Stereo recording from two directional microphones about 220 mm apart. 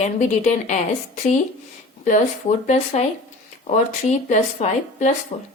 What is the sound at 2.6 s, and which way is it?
A woman's voice, 30° left (ahead or behind).